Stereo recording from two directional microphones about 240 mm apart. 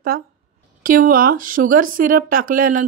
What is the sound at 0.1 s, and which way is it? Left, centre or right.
Speech, right.